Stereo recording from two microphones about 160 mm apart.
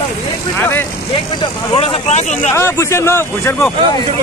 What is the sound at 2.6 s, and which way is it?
Speech, 15° left (ahead or behind).